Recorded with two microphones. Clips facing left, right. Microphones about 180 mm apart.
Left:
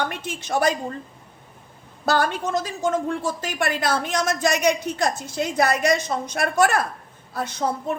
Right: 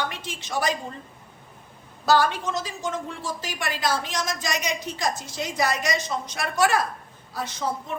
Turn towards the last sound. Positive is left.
turn(degrees=55)  # may be behind; listen again after turning